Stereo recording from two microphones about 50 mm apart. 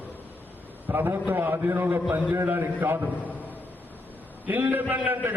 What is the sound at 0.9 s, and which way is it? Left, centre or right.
A man's voice, right.